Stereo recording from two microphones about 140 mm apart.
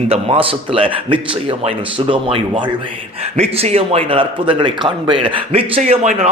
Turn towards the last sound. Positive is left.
turn(degrees=-50)  # may be behind; listen again after turning